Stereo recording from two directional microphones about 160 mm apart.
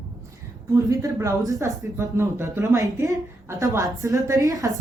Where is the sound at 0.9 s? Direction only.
20° right (ahead or behind).